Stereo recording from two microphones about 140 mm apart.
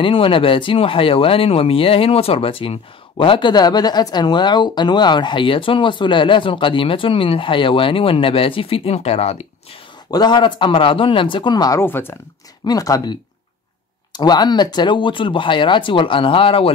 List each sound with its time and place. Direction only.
0.0 s speech: 40° left (ahead or behind)
10.1 s speech: 30° left (ahead or behind)
11.8 s speech: 15° left (ahead or behind); by 16.7 s 40° left (ahead or behind)